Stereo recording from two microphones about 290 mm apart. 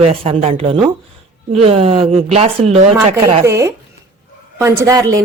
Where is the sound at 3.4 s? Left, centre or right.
Centre.